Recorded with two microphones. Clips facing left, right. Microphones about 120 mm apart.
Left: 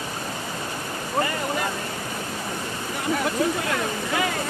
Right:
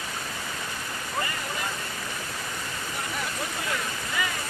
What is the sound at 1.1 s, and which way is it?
Vehicle, 50° left (ahead or behind).